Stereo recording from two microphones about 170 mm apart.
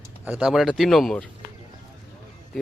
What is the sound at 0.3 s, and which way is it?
Speech, 5° right (ahead or behind).